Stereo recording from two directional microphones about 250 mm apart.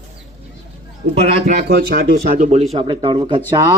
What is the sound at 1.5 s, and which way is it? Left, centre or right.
Speech, right.